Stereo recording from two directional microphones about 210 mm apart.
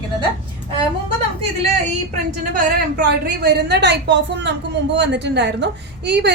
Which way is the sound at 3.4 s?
55° right (ahead or behind).